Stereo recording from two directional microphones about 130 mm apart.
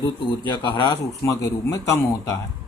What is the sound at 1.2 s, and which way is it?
Speech, 20° left (ahead or behind).